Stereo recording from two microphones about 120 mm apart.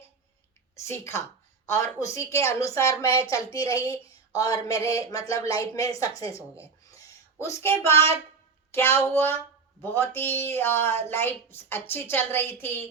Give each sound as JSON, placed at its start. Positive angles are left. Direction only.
{"t": 0.8, "sound": "a woman's voice", "side_deg": 20}
{"t": 3.9, "sound": "a sound", "side_deg": 30}
{"t": 4.9, "sound": "a woman's voice", "side_deg": 25}